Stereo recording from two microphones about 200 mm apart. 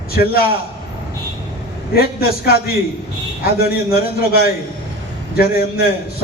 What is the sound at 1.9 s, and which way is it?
A man's voice, 50° left (ahead or behind).